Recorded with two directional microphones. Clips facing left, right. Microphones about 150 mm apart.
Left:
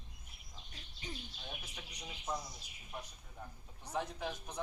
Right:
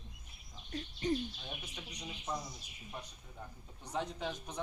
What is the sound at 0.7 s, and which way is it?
Bird, 50° right (ahead or behind).